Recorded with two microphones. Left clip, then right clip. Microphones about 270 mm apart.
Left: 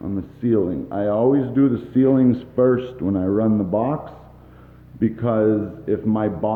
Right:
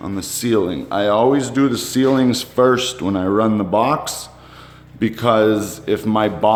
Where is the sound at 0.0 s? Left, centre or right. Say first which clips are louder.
Right 3 dB; centre.